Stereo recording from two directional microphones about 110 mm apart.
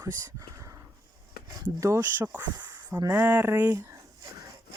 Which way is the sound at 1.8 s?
25° right (ahead or behind).